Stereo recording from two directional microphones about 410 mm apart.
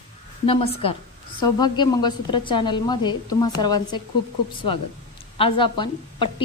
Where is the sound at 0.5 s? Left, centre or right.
Centre.